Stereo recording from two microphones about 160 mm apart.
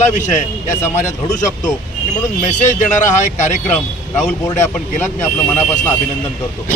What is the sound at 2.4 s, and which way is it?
Speech, 50° left (ahead or behind).